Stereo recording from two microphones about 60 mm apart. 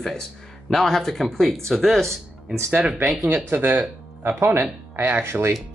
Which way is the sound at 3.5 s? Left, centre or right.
Right.